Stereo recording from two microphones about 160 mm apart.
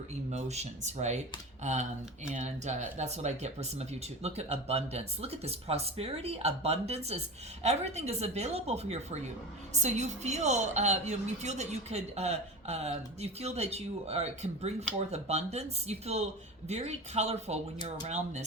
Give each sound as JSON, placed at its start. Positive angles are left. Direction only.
{"t": 0.1, "sound": "a woman's voice", "side_deg": -45}